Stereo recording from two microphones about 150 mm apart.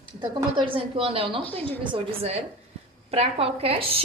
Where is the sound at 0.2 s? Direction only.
30° right (ahead or behind).